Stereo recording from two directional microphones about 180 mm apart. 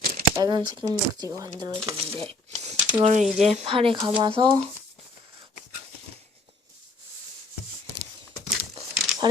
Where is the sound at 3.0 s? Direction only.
40° right (ahead or behind).